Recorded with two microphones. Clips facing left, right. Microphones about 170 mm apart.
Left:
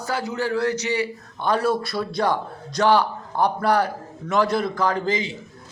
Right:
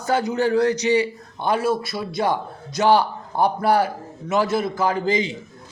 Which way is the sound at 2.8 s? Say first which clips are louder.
Right 1 dB; 15° right (ahead or behind).